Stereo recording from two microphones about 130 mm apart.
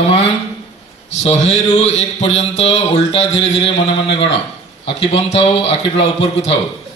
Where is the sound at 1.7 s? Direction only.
55° left (ahead or behind).